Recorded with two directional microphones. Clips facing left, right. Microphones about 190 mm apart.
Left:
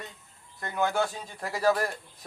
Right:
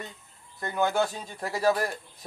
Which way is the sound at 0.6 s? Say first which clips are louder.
Right 2 dB; 30° right (ahead or behind).